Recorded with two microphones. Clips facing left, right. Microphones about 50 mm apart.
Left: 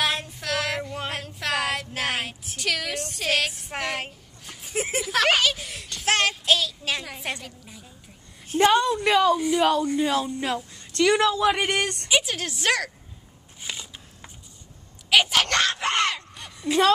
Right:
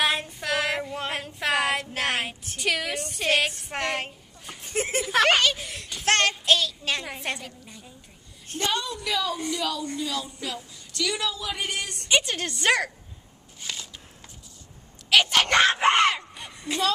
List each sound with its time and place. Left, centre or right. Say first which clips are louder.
0.0 s female singing: right 1 dB; centre
7.2 s a woman's voice: even; centre
8.8 s speech: left 9 dB; left
9.6 s speech: left 8 dB; left
12.1 s a woman's voice: right 4 dB; centre
13.6 s crackle: left 1 dB; centre
15.0 s speech: even; centre
15.4 s speech: right 4 dB; centre
15.7 s a sound: right 5 dB; right
16.0 s a sound: right 3 dB; centre